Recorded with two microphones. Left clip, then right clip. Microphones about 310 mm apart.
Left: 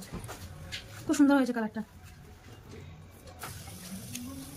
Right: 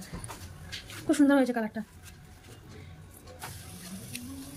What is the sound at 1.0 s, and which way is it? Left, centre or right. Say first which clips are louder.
Speech: right 1 dB; centre.